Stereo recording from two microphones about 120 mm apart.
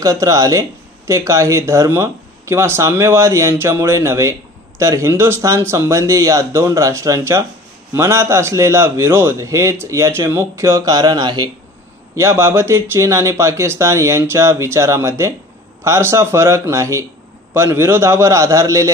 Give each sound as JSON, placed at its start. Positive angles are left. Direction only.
{"t": 0.0, "sound": "speech", "side_deg": -30}
{"t": 12.2, "sound": "speech", "side_deg": -25}